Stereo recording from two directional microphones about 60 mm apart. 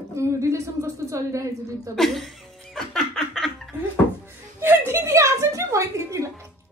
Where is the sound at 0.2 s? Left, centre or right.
Right.